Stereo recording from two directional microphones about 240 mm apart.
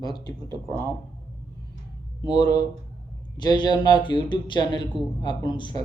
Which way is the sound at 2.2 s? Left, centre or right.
Centre.